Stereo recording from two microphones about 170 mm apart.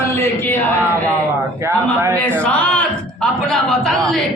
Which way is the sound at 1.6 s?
15° right (ahead or behind).